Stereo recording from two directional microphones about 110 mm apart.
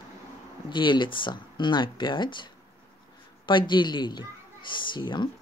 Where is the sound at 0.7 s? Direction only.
45° left (ahead or behind).